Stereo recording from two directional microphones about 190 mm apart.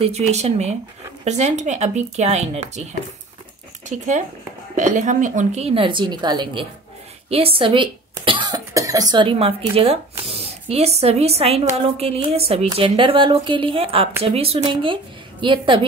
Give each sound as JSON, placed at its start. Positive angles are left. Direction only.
{"t": 0.0, "sound": "a woman's voice", "side_deg": -35}
{"t": 3.9, "sound": "a woman's voice", "side_deg": -40}